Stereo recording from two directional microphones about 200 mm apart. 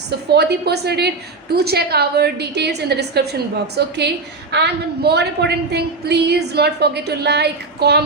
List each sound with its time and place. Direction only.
0.3 s a woman's voice: 55° right (ahead or behind)